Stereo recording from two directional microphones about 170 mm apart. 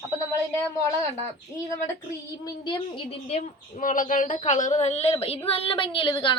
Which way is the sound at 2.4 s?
30° left (ahead or behind).